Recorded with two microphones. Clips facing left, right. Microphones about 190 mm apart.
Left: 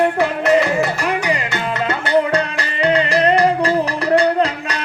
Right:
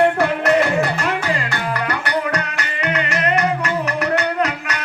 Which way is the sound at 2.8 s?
30° left (ahead or behind).